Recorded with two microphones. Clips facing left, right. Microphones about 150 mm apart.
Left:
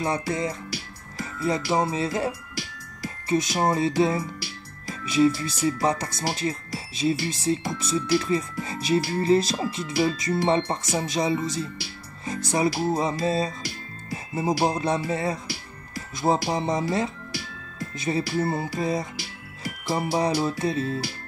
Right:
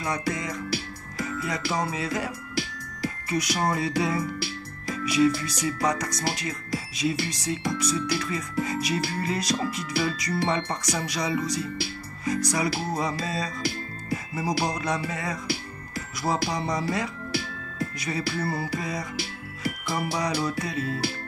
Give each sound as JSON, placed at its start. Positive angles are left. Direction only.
{"t": 0.0, "sound": "speech", "side_deg": 30}